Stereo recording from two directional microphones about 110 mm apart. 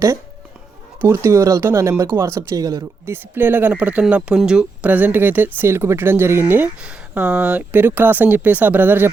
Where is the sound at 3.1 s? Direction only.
15° right (ahead or behind).